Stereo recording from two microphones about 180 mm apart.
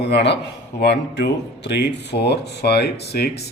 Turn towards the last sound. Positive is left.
turn(degrees=60)  # may be behind; listen again after turning